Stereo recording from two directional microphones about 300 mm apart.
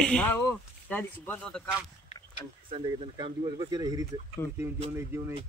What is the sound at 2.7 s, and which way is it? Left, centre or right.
Speech, centre.